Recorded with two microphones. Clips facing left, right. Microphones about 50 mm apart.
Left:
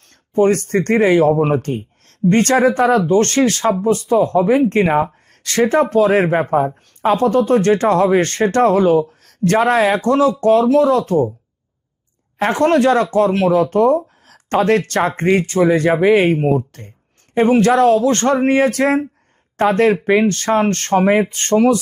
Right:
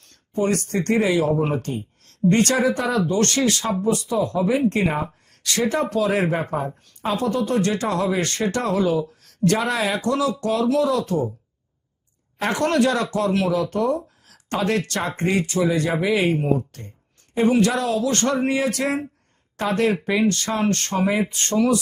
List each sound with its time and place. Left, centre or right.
0.0 s speech: left
12.4 s speech: left